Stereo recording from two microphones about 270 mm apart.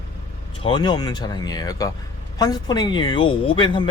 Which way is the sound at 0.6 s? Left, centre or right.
Centre.